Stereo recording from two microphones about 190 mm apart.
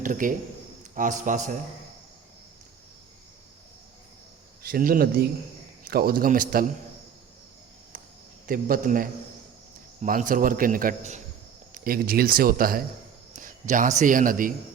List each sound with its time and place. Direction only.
0.0 s a man's voice: 45° right (ahead or behind)
4.6 s a man's voice: 50° right (ahead or behind)
8.4 s a man's voice: 50° right (ahead or behind)
13.3 s a sound: 45° right (ahead or behind)
14.0 s a man's voice: 45° right (ahead or behind)